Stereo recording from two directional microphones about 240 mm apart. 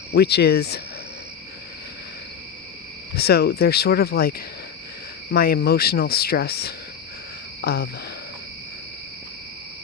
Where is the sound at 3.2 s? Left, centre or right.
Left.